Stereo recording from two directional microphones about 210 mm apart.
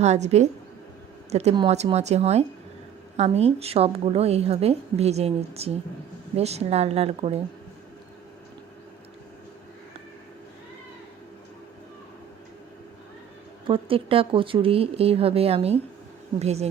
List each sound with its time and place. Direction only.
0.0 s a woman's voice: 35° right (ahead or behind)
13.7 s a woman's voice: 25° right (ahead or behind)